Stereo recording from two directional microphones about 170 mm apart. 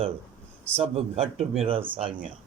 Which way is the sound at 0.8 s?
35° right (ahead or behind).